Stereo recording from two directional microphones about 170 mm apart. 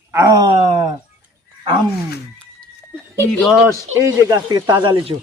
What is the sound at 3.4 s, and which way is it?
Speech, 5° right (ahead or behind).